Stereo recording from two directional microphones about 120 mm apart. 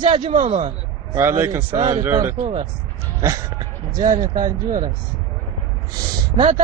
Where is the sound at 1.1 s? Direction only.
20° right (ahead or behind).